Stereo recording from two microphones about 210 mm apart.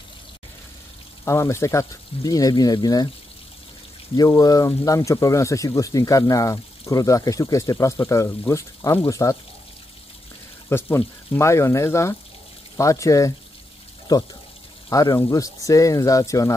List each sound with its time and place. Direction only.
1.2 s speech: 15° left (ahead or behind)
4.2 s speech: 15° left (ahead or behind)
10.7 s speech: 10° left (ahead or behind)